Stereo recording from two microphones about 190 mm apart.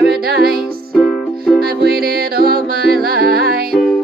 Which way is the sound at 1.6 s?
55° right (ahead or behind).